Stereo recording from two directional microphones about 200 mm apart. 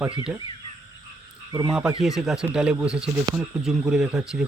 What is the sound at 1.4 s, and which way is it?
Speech, 20° right (ahead or behind).